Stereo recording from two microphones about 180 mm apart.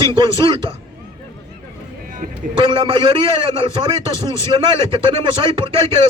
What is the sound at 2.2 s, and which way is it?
Speech, 50° right (ahead or behind).